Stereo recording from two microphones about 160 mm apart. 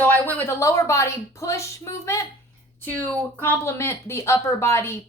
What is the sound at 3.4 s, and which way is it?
Speech, 15° left (ahead or behind).